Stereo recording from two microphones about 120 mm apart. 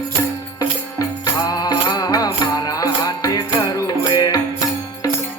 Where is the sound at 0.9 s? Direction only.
30° left (ahead or behind).